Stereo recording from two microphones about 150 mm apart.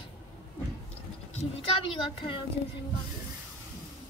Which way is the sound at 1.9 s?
35° left (ahead or behind).